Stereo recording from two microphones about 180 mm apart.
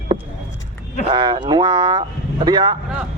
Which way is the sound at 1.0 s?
25° right (ahead or behind).